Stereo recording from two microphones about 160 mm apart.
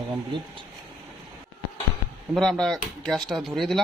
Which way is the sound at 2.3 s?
Centre (ahead or behind).